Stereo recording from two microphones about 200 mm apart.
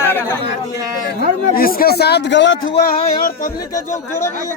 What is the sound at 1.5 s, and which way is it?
A man's voice, 45° left (ahead or behind).